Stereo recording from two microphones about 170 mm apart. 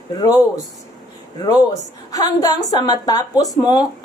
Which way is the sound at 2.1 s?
20° left (ahead or behind).